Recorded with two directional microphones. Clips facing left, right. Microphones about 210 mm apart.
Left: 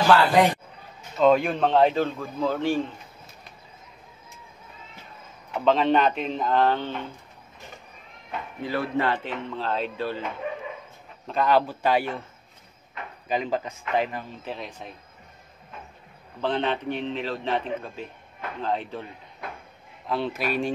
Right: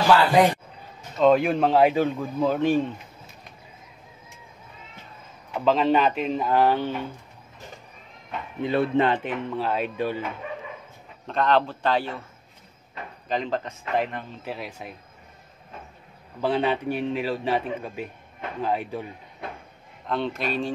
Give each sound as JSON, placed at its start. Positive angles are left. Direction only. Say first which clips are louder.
{"t": 0.0, "sound": "a man's voice", "louder": "right 1 dB", "side_deg": -10}
{"t": 5.5, "sound": "speech", "louder": "even", "side_deg": -5}
{"t": 8.6, "sound": "a man's voice", "louder": "right 4 dB", "side_deg": -25}
{"t": 11.2, "sound": "a man's voice", "louder": "even", "side_deg": 5}
{"t": 13.3, "sound": "speech", "louder": "even", "side_deg": 5}
{"t": 16.3, "sound": "a man's voice", "louder": "right 2 dB", "side_deg": -10}
{"t": 20.1, "sound": "a man's voice", "louder": "even", "side_deg": 5}